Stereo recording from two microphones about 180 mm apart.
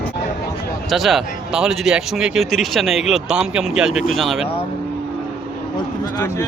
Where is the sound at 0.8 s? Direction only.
Centre (ahead or behind).